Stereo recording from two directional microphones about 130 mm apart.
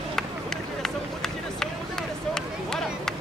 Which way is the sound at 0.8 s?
5° left (ahead or behind).